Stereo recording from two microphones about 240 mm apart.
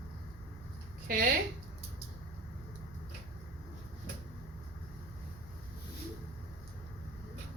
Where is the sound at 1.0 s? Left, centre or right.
Right.